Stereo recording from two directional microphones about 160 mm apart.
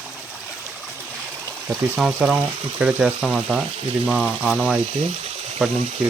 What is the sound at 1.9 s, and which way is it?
Speech, 5° right (ahead or behind).